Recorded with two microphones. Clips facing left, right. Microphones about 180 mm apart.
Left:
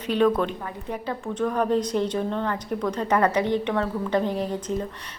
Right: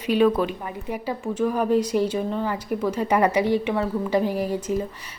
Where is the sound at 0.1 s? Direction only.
10° right (ahead or behind).